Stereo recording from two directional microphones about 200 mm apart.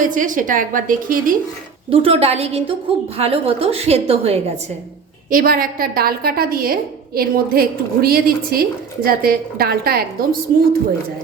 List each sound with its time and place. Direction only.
0.0 s a woman's voice: 40° right (ahead or behind)
1.9 s a woman's voice: 30° right (ahead or behind)
5.3 s a woman's voice: 45° right (ahead or behind)